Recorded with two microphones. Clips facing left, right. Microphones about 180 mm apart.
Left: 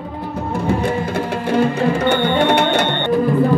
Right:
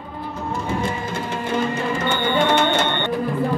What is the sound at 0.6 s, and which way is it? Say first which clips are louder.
Music: left 7 dB; 65° left (ahead or behind).